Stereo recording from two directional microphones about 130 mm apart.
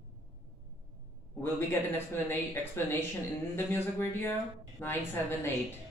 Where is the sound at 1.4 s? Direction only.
20° left (ahead or behind).